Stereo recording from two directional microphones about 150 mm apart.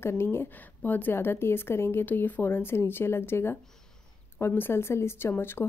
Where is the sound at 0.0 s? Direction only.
15° left (ahead or behind).